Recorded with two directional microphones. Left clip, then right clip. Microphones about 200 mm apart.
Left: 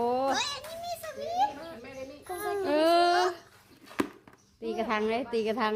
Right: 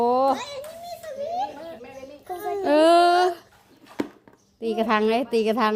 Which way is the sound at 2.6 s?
35° right (ahead or behind).